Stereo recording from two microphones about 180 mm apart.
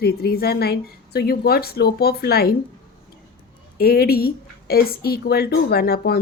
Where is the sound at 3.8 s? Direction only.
60° left (ahead or behind).